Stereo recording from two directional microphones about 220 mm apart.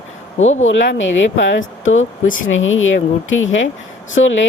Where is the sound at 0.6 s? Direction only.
60° left (ahead or behind).